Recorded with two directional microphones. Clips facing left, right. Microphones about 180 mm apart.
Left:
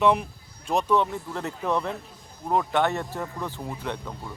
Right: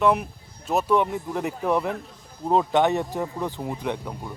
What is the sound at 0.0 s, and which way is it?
Speech, 5° right (ahead or behind).